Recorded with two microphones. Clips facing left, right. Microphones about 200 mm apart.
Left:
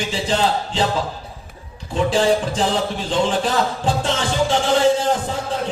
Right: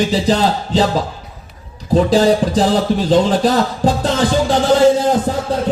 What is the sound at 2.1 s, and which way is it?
A man's voice, 40° right (ahead or behind).